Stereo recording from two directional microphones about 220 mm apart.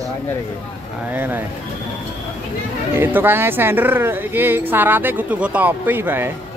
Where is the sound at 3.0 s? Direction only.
10° right (ahead or behind).